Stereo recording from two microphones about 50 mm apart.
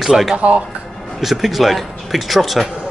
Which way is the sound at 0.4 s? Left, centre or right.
Right.